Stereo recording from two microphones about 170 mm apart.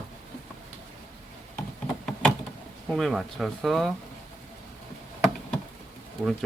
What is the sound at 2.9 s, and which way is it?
Speech, centre (ahead or behind).